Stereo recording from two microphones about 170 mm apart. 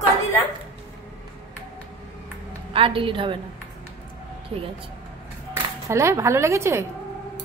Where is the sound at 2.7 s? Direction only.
30° right (ahead or behind).